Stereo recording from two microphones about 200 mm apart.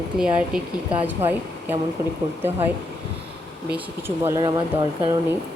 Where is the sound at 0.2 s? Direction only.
5° right (ahead or behind).